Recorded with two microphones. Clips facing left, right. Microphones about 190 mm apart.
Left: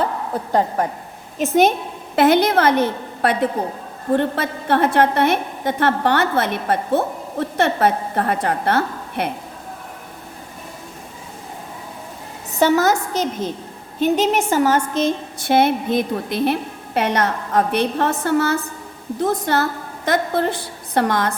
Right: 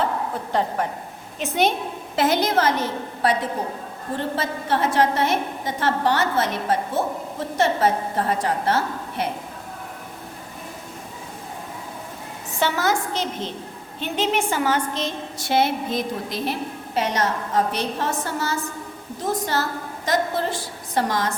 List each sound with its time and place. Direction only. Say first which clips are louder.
1.4 s a woman's voice: left 6 dB; 45° left (ahead or behind)
2.1 s a woman's voice: left 6 dB; 60° left (ahead or behind)
12.5 s a woman's voice: left 6 dB; 40° left (ahead or behind); by 21.3 s 60° left (ahead or behind)